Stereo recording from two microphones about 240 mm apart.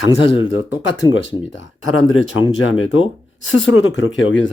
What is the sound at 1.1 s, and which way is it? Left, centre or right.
Speech, left.